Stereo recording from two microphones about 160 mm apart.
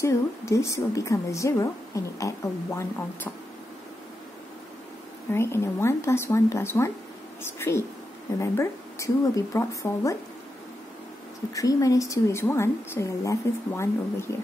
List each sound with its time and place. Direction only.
0.0 s speech: 20° left (ahead or behind)
5.3 s speech: 15° left (ahead or behind)
11.5 s speech: 20° left (ahead or behind)